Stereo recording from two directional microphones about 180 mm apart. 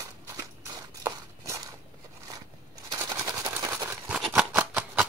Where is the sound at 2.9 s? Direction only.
20° right (ahead or behind).